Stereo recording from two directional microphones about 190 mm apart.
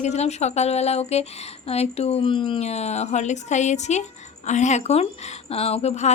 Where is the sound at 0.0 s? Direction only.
35° left (ahead or behind).